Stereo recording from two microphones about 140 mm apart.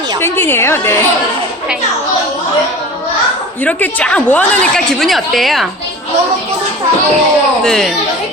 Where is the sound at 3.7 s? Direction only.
10° left (ahead or behind).